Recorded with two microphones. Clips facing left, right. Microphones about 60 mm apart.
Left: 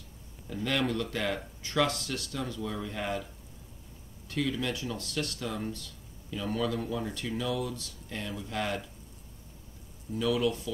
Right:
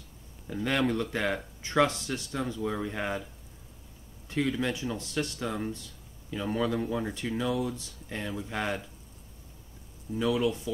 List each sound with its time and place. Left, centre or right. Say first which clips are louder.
0.5 s speech: right 2 dB; right
4.3 s speech: right 2 dB; right
10.1 s speech: right 1 dB; right